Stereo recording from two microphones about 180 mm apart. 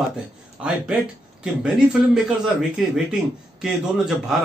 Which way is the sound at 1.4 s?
5° right (ahead or behind).